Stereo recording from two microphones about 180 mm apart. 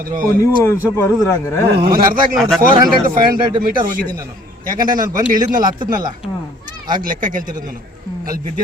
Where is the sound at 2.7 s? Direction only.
25° right (ahead or behind).